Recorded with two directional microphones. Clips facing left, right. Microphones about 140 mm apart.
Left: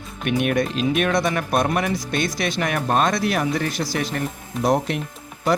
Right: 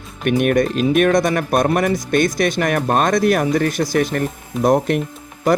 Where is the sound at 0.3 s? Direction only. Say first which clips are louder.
Right 5 dB; 50° right (ahead or behind).